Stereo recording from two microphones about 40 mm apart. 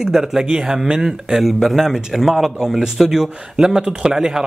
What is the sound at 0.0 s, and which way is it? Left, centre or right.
Speech, centre.